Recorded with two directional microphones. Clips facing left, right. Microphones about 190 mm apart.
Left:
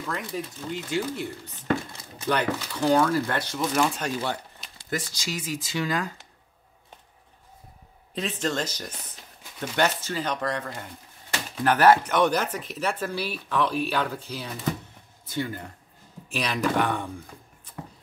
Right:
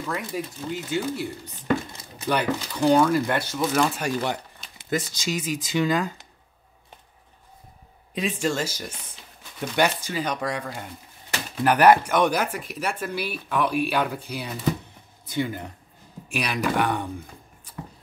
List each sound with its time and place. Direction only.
0.0 s speech: 5° right (ahead or behind)
3.5 s speech: centre (ahead or behind)
4.7 s speech: 20° right (ahead or behind)
8.1 s speech: 10° right (ahead or behind)